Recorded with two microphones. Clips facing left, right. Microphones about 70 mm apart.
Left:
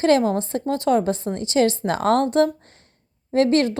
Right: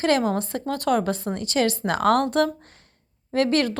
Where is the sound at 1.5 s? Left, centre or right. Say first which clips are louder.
Left 4 dB; right.